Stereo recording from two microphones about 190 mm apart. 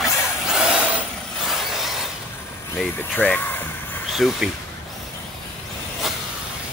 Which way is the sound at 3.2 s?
10° left (ahead or behind).